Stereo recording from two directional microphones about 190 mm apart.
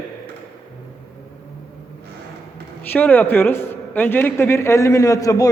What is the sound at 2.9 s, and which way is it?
A man's voice, 10° left (ahead or behind).